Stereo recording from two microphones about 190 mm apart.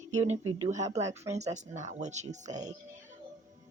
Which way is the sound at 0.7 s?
35° right (ahead or behind).